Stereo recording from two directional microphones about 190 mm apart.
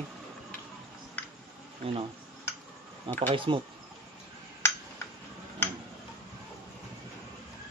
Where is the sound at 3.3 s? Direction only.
25° right (ahead or behind).